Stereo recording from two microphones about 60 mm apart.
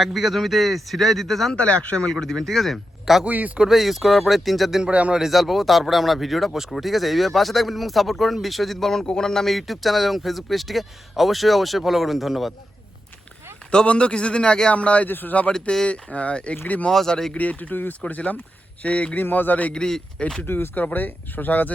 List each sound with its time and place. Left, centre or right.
0.0 s speech: centre
1.5 s speech: centre
2.0 s speech: centre
3.2 s speech: right
3.7 s speech: centre
4.8 s speech: right
5.1 s speech: centre
13.7 s a man's voice: centre
16.9 s a man's voice: centre
17.3 s speech: left
19.7 s a man's voice: centre
20.5 s speech: left